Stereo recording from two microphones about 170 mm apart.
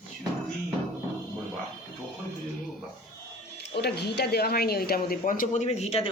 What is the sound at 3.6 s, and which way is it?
Speech, 75° left (ahead or behind).